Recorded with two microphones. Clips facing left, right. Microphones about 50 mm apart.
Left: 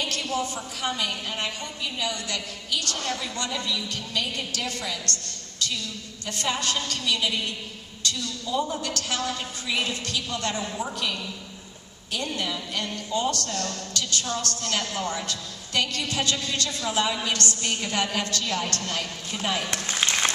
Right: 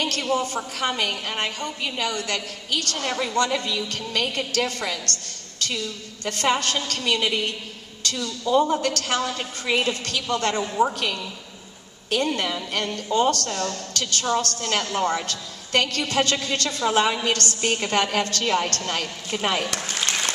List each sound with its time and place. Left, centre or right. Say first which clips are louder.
0.0 s a woman's voice: right 3 dB; right
0.3 s a woman's voice: right 6 dB; right
0.6 s a woman's voice: right 4 dB; right
5.6 s a sound: right 2 dB; right
6.2 s a woman's voice: right 5 dB; right
20.0 s applause: left 2 dB; left